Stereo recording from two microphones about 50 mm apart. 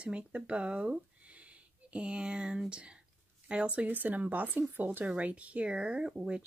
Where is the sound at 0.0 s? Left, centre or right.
Right.